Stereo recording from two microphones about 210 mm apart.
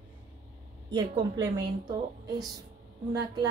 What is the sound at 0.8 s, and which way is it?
Speech, 20° right (ahead or behind).